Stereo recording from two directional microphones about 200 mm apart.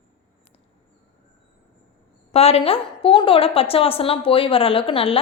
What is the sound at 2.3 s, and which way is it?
A woman's voice, 30° left (ahead or behind).